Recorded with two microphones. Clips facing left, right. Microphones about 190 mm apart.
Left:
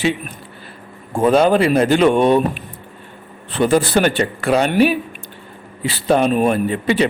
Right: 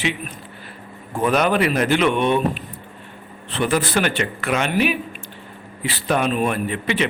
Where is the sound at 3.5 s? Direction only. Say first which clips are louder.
Left 5 dB; 35° left (ahead or behind).